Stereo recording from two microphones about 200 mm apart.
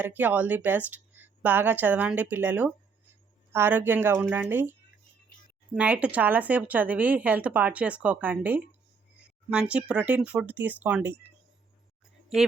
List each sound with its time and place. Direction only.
0.0 s speech: 10° right (ahead or behind)
5.7 s speech: 5° right (ahead or behind)